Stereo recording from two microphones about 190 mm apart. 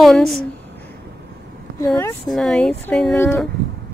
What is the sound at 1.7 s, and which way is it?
Speech, 15° left (ahead or behind).